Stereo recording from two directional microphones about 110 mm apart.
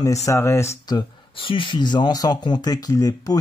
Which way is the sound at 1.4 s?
50° left (ahead or behind).